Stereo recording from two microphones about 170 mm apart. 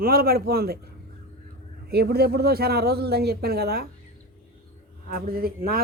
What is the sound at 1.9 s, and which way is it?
Speech, 65° right (ahead or behind).